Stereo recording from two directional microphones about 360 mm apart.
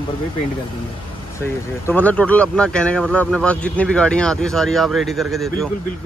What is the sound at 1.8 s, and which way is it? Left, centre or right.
Speech, centre.